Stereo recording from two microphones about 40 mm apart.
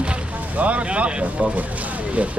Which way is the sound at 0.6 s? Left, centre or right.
Right.